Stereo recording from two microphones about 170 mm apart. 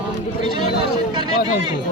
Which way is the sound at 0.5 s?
30° right (ahead or behind).